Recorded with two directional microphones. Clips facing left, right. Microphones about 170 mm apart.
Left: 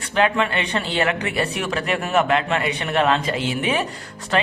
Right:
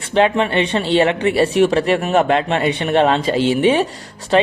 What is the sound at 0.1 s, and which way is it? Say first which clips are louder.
Speech: right 5 dB; 25° right (ahead or behind).